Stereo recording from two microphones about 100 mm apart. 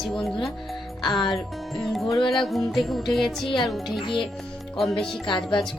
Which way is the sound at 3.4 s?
55° left (ahead or behind).